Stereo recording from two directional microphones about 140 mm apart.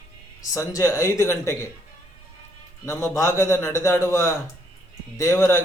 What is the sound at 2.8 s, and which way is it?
A man's voice, 20° left (ahead or behind).